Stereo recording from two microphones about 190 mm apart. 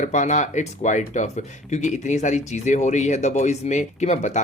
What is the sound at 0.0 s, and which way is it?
Speech, 40° left (ahead or behind).